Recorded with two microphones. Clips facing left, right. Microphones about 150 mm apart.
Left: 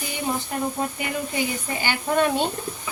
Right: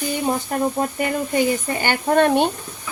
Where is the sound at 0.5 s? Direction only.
45° right (ahead or behind).